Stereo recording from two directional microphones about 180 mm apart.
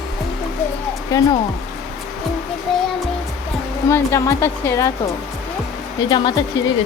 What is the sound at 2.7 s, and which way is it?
Music, centre (ahead or behind).